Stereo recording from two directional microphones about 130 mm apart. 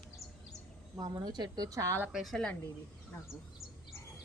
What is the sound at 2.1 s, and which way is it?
Speech, centre (ahead or behind).